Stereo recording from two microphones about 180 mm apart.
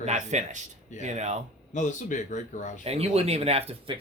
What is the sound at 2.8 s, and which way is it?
Speech, 35° right (ahead or behind).